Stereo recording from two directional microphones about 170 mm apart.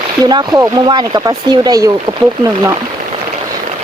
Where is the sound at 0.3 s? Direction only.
25° right (ahead or behind).